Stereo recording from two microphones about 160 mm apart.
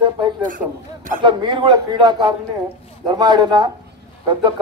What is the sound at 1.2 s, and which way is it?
A man's voice, 30° right (ahead or behind).